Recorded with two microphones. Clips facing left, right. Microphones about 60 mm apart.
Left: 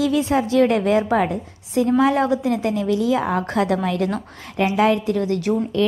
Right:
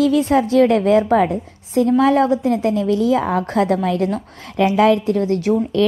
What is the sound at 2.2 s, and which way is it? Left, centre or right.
A woman's voice, right.